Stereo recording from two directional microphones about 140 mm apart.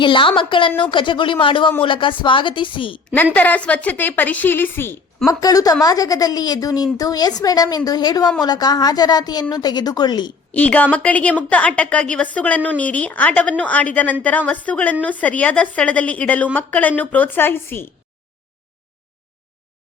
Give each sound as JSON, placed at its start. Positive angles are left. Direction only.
{"t": 0.0, "sound": "a woman's voice", "side_deg": 35}
{"t": 3.3, "sound": "a woman's voice", "side_deg": 10}
{"t": 5.3, "sound": "a woman's voice", "side_deg": 25}
{"t": 10.5, "sound": "a woman's voice", "side_deg": 10}